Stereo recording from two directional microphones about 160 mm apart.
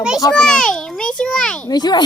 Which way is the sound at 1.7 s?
25° left (ahead or behind).